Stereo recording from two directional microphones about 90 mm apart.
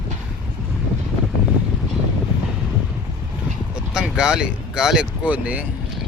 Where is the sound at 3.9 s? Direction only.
10° right (ahead or behind).